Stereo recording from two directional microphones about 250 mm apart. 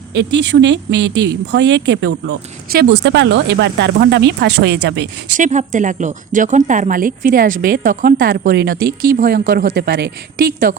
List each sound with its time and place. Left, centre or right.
0.2 s speech: right
5.4 s a woman's voice: right